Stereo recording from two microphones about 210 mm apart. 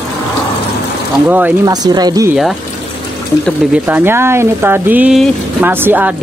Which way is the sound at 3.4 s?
5° right (ahead or behind).